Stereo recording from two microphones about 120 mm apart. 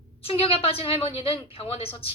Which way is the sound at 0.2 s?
50° left (ahead or behind).